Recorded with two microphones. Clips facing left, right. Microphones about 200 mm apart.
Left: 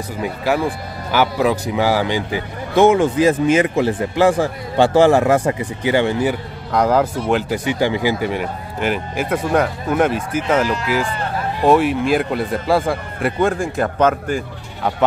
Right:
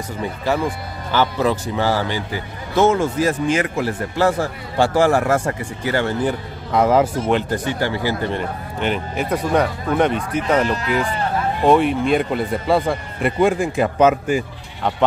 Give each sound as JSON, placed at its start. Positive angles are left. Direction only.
{"t": 1.1, "sound": "speech", "side_deg": 10}
{"t": 6.2, "sound": "speech", "side_deg": 0}
{"t": 14.8, "sound": "speech", "side_deg": 5}